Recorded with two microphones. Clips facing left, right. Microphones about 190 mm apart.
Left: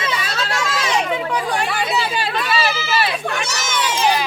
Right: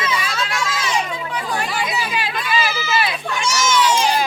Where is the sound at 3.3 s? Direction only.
60° left (ahead or behind).